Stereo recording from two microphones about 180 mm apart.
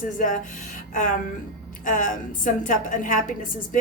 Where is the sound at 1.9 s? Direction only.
45° left (ahead or behind).